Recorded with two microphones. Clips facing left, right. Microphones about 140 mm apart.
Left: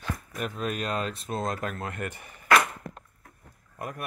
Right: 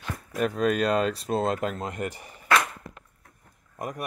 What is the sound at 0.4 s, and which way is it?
Speech, 40° right (ahead or behind).